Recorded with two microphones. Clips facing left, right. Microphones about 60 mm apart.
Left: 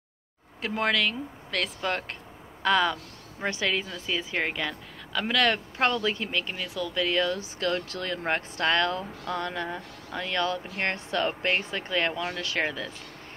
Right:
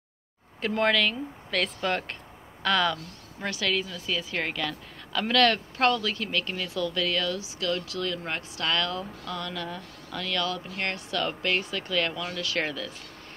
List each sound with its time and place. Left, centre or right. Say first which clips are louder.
0.6 s speech: right 2 dB; centre; by 7.3 s left
7.3 s speech: left 1 dB; left
12.5 s speech: left 1 dB; centre